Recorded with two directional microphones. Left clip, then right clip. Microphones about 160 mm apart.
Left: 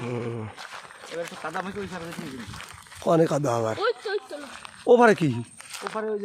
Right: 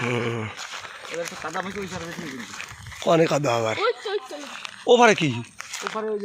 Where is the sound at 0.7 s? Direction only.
40° right (ahead or behind).